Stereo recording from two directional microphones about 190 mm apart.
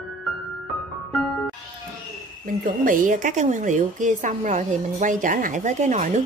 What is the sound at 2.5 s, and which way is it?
A woman's voice, 45° right (ahead or behind).